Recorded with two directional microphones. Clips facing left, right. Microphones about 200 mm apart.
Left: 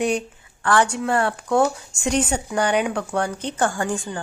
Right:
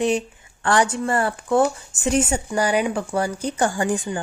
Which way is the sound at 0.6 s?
20° right (ahead or behind).